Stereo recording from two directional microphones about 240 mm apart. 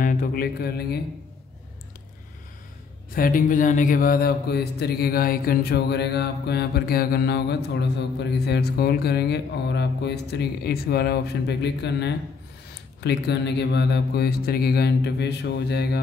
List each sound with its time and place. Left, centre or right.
0.0 s mantra: left
3.2 s mantra: left
13.0 s speech: left